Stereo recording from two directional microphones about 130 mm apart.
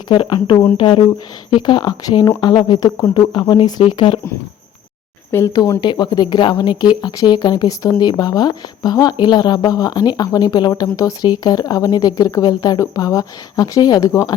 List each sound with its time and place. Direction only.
0.1 s speech: 40° left (ahead or behind)
5.3 s a woman's voice: 25° left (ahead or behind)